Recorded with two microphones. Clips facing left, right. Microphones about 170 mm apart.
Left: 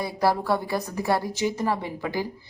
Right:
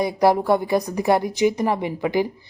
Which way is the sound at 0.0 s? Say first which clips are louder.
Right 6 dB; 20° right (ahead or behind).